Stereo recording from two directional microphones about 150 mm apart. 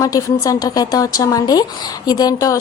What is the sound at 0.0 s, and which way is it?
A woman's voice, 25° left (ahead or behind).